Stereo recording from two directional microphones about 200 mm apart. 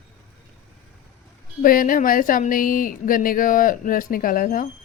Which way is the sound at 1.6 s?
45° left (ahead or behind).